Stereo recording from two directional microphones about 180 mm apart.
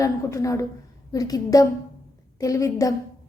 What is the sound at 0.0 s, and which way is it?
A woman's voice, 20° left (ahead or behind).